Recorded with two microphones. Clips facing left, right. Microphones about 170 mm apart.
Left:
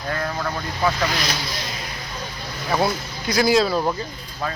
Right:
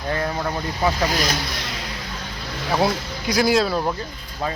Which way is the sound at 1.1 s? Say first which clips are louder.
Right 3 dB; 45° right (ahead or behind).